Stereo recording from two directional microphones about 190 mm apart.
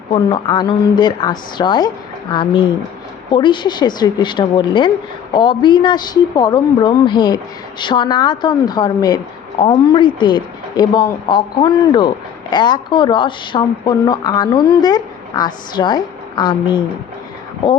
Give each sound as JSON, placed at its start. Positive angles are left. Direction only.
{"t": 0.1, "sound": "a woman's voice", "side_deg": 25}